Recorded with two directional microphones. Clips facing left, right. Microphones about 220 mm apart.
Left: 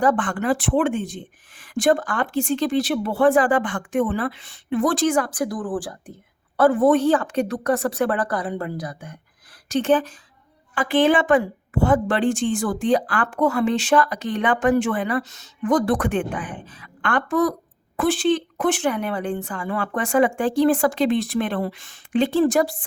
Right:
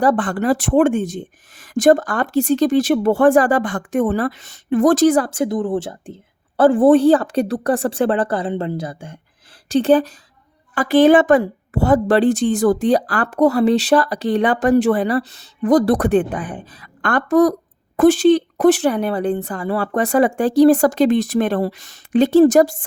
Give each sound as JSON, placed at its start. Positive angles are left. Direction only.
{"t": 0.0, "sound": "a woman's voice", "side_deg": -35}